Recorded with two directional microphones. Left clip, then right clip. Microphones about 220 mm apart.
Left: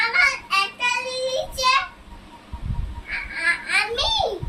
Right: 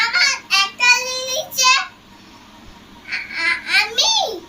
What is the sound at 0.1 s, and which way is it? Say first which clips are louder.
Child singing: right 2 dB; 5° left (ahead or behind).